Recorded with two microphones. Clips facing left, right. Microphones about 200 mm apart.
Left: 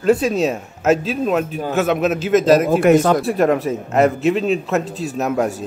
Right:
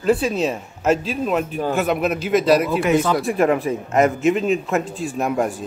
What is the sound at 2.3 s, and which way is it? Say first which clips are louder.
Speech: left 3 dB; 45° left (ahead or behind).